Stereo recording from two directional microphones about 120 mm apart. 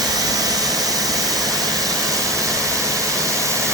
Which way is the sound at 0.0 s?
30° right (ahead or behind).